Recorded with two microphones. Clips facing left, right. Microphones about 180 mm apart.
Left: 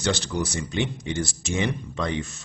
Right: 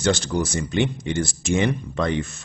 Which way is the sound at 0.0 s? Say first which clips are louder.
Right 4 dB; 50° right (ahead or behind).